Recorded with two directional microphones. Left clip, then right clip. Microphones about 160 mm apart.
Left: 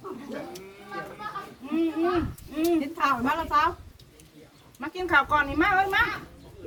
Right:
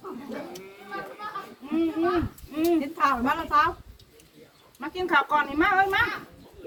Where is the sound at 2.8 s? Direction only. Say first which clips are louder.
Right 1 dB; 30° left (ahead or behind).